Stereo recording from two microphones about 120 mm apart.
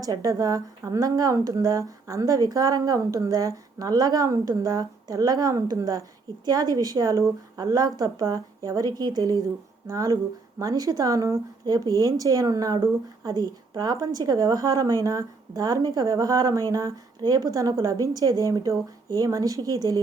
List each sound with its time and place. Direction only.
0.0 s speech: 30° right (ahead or behind)